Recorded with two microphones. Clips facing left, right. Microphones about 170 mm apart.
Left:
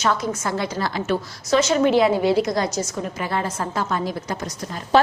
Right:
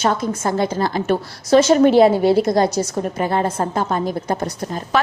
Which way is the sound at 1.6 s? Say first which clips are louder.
Right 5 dB; 35° right (ahead or behind).